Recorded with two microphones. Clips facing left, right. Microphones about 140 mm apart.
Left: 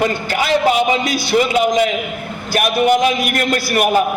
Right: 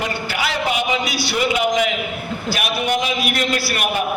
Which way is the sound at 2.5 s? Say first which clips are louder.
Left 8 dB; 50° left (ahead or behind).